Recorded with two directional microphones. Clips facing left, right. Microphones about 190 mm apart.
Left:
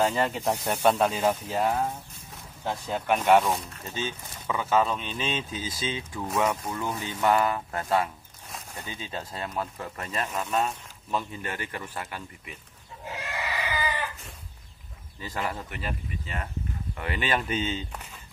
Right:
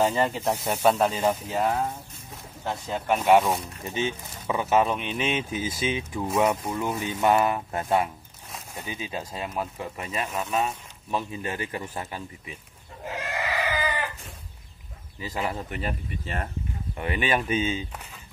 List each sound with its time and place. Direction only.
0.0 s speech: 5° right (ahead or behind)
8.5 s a sound: centre (ahead or behind)
8.8 s speech: 15° right (ahead or behind)
11.1 s a man's voice: 15° right (ahead or behind)
13.0 s goat: 50° right (ahead or behind)
15.1 s speech: 15° right (ahead or behind)
16.9 s speech: 20° right (ahead or behind)